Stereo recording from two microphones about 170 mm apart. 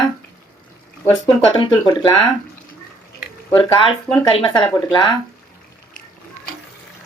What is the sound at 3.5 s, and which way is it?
Speech, 30° left (ahead or behind).